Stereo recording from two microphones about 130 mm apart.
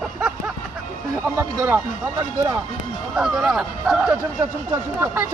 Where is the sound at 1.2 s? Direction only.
15° right (ahead or behind).